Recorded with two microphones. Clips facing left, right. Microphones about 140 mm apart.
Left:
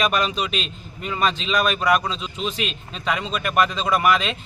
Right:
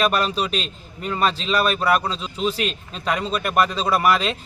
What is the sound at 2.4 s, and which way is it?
Speech, 35° right (ahead or behind).